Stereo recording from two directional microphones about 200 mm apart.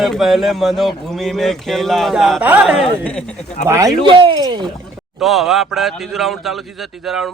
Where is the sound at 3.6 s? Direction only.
15° right (ahead or behind).